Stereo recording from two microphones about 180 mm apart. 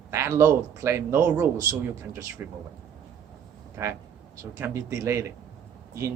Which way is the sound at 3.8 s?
15° right (ahead or behind).